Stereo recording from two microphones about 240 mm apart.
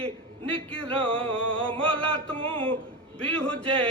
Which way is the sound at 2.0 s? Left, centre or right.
Centre.